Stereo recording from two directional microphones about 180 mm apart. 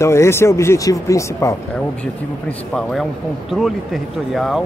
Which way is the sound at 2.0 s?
5° left (ahead or behind).